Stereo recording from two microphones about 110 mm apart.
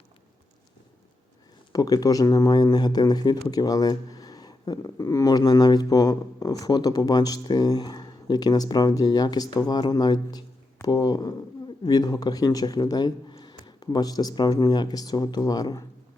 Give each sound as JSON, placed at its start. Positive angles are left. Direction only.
{"t": 1.7, "sound": "speech", "side_deg": 35}